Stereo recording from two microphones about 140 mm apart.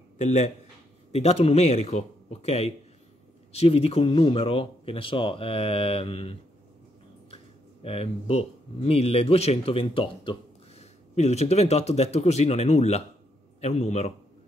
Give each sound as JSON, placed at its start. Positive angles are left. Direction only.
{"t": 0.2, "sound": "speech", "side_deg": 55}
{"t": 7.8, "sound": "speech", "side_deg": 45}
{"t": 10.8, "sound": "speech", "side_deg": 50}